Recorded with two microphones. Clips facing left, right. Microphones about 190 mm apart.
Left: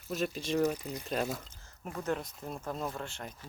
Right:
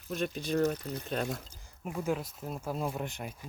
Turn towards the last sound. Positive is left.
turn(degrees=-15)  # may be behind; listen again after turning